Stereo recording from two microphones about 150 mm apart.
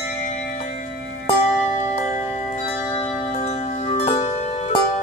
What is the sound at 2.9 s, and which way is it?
Music, 40° left (ahead or behind).